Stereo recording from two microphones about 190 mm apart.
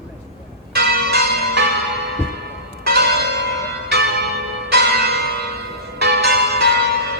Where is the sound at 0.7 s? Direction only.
60° right (ahead or behind).